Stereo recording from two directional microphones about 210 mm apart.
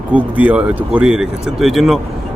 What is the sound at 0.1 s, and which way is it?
A man's voice, 5° right (ahead or behind).